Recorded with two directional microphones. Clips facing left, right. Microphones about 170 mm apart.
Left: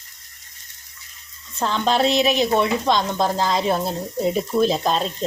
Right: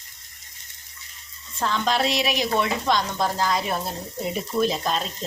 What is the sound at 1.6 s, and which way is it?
Speech, 30° left (ahead or behind).